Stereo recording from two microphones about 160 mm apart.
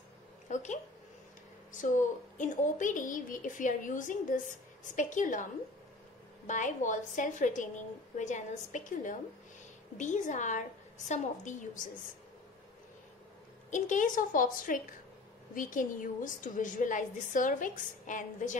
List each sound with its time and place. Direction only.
0.5 s a sound: 50° left (ahead or behind)
2.3 s a woman's voice: 50° left (ahead or behind)
13.7 s a woman's voice: 50° left (ahead or behind)